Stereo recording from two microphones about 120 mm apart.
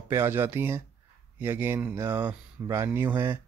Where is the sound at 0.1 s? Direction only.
20° right (ahead or behind).